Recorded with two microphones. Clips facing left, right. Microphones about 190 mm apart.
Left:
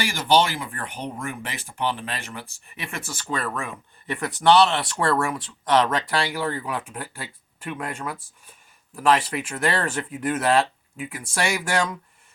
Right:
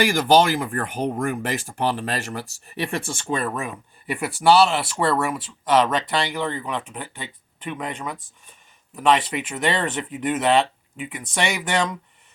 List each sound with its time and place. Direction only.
0.0 s speech: 50° right (ahead or behind); by 11.9 s centre (ahead or behind)